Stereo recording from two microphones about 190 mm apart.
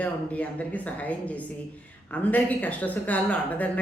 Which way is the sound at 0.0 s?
10° left (ahead or behind).